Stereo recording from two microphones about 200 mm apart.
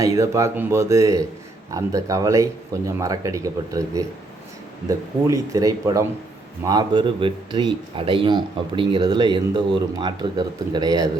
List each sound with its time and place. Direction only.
0.0 s speech: 15° right (ahead or behind)